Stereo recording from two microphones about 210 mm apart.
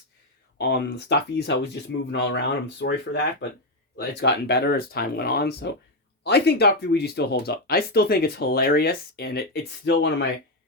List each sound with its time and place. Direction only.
0.6 s speech: 55° left (ahead or behind)